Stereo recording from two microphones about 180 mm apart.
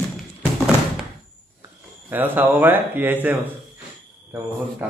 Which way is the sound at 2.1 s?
10° right (ahead or behind).